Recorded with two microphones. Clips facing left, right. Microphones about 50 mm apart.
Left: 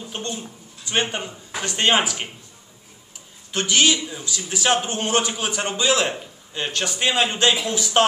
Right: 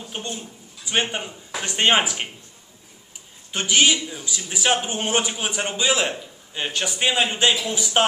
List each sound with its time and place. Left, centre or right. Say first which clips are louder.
0.1 s a sound: left 1 dB; centre
0.9 s a man's voice: even; centre
3.5 s a man's voice: even; centre